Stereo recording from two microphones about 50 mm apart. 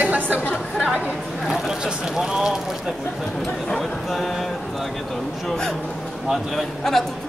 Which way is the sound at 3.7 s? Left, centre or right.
Centre.